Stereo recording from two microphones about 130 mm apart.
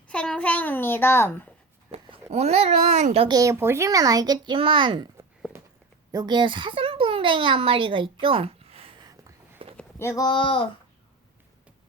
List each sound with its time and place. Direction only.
0.1 s babbling: 10° left (ahead or behind)
1.9 s a child's voice: 55° right (ahead or behind)
3.2 s speech: 25° right (ahead or behind)
6.1 s a woman's voice: 30° right (ahead or behind)
8.2 s a sound: 45° right (ahead or behind)
10.0 s speech: 20° left (ahead or behind)
10.2 s speech: 40° left (ahead or behind)